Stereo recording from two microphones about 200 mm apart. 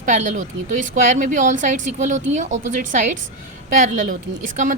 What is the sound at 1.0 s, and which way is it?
A woman's voice, 40° right (ahead or behind).